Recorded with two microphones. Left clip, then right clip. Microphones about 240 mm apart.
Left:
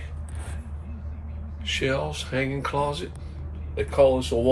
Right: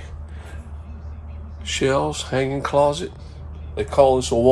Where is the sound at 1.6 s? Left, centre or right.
Right.